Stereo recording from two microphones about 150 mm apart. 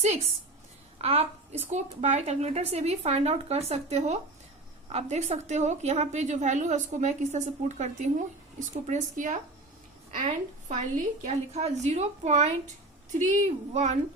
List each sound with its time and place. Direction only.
0.9 s a woman's voice: 40° right (ahead or behind)
10.7 s a woman's voice: 55° right (ahead or behind)